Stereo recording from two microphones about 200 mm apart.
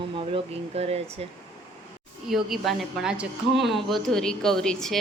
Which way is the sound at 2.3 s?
Centre (ahead or behind).